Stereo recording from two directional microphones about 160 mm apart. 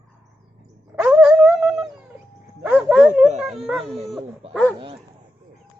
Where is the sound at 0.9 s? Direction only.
5° right (ahead or behind).